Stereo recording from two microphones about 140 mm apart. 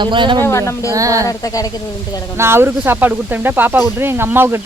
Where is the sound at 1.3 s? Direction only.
25° left (ahead or behind).